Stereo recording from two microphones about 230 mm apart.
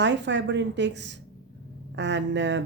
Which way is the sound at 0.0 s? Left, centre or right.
Right.